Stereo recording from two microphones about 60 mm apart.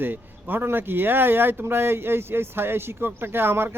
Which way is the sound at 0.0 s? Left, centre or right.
Right.